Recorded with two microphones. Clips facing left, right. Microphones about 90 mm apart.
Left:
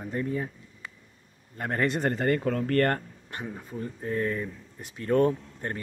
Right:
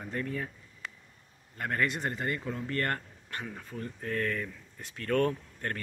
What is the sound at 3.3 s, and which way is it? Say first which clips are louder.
Speech: left 3 dB; 20° left (ahead or behind).